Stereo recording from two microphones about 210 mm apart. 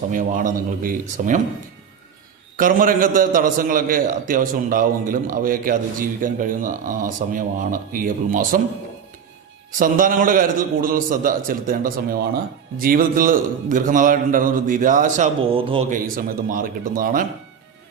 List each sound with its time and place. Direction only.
0.1 s a man's voice: 40° right (ahead or behind)
2.6 s a man's voice: 40° right (ahead or behind)
9.7 s a man's voice: 40° right (ahead or behind)
15.9 s a man's voice: 40° right (ahead or behind)